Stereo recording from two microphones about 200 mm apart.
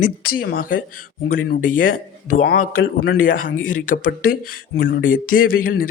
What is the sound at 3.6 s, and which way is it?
Speech, 40° left (ahead or behind).